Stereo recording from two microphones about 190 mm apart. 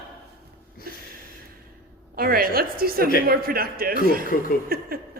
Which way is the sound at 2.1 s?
50° right (ahead or behind).